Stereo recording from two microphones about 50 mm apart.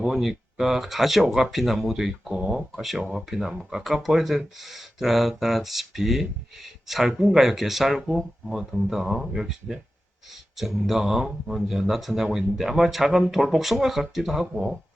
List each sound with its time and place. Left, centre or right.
0.0 s speech: centre
3.0 s speech: centre
3.2 s speech: centre